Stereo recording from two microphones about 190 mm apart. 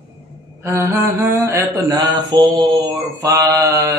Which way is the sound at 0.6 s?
10° right (ahead or behind).